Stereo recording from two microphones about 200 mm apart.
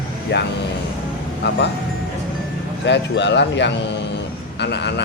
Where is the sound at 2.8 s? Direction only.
60° left (ahead or behind).